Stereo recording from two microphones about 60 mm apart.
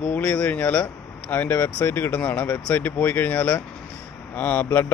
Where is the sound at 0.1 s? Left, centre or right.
Left.